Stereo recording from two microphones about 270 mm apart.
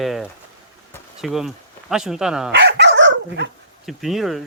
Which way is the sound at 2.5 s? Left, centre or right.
Right.